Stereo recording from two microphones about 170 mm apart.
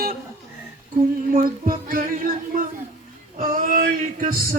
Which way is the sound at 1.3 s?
55° right (ahead or behind).